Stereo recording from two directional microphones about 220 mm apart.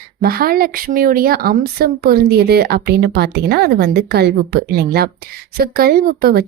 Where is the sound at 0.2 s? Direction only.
40° right (ahead or behind).